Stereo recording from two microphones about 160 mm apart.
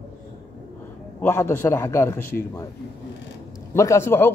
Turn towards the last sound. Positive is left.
turn(degrees=15)  # may be behind; listen again after turning